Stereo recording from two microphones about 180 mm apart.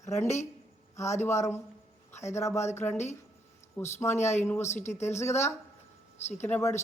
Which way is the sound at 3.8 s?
15° left (ahead or behind).